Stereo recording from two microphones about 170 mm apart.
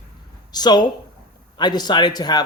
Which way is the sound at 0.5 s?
25° left (ahead or behind).